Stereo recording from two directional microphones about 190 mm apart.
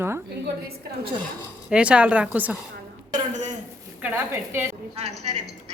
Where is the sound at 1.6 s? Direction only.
5° right (ahead or behind).